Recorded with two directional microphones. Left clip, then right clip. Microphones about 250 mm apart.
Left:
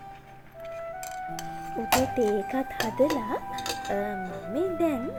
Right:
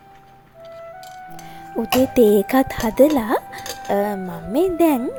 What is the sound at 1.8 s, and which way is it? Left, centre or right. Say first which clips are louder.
Speech: right 9 dB; right.